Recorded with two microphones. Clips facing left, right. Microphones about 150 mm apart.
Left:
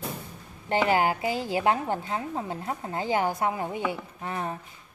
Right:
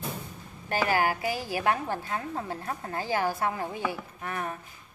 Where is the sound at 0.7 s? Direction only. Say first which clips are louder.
Left 3 dB; 20° left (ahead or behind).